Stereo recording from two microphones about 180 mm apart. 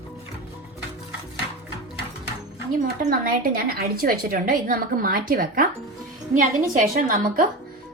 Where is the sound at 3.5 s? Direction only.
55° right (ahead or behind).